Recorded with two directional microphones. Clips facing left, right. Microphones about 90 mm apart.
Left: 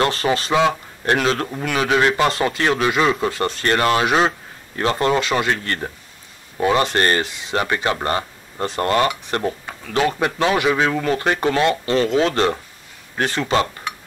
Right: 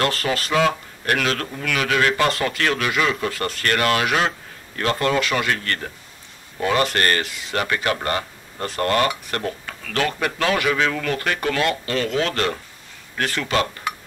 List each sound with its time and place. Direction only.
0.0 s speech: 25° left (ahead or behind)